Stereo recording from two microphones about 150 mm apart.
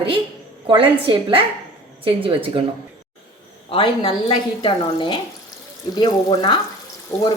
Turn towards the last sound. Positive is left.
turn(degrees=20)  # may be behind; listen again after turning